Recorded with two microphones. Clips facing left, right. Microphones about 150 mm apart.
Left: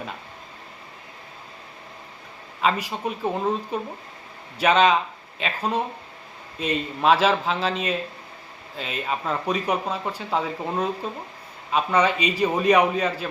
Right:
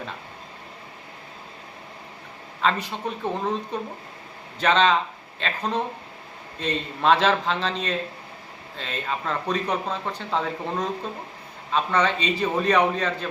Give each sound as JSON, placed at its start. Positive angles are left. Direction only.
{"t": 2.6, "sound": "speech", "side_deg": 10}